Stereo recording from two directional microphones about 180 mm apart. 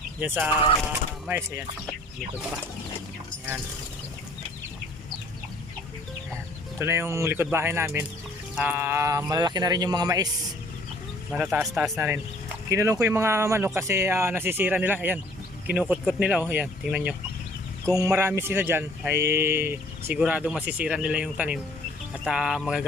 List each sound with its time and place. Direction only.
0.2 s speech: 10° right (ahead or behind)
6.7 s speech: 15° right (ahead or behind)
11.5 s speech: 5° right (ahead or behind)
17.8 s speech: 20° right (ahead or behind)